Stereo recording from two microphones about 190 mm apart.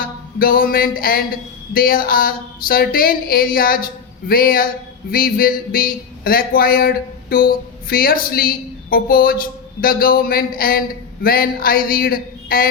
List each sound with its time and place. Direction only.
0.0 s speech: 50° left (ahead or behind)